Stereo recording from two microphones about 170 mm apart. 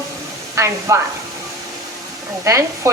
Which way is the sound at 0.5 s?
15° right (ahead or behind).